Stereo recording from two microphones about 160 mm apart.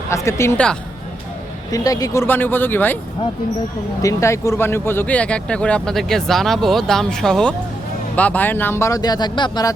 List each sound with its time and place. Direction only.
0.1 s speech: 20° left (ahead or behind)
1.7 s speech: 20° left (ahead or behind)
4.0 s speech: 20° left (ahead or behind)